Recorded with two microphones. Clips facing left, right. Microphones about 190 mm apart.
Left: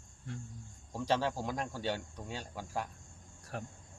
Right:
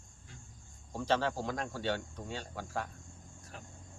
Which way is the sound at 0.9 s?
10° left (ahead or behind).